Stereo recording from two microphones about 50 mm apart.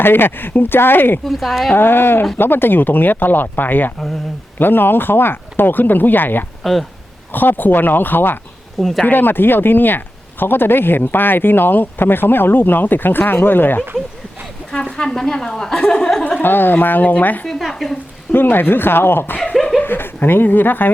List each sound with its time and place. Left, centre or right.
0.0 s speech: left
1.2 s a woman's voice: centre
1.7 s speech: left
6.6 s speech: centre
7.3 s speech: left
8.8 s a woman's voice: centre
9.0 s speech: left
14.7 s speech: centre
16.4 s speech: left
17.4 s speech: centre
18.3 s speech: left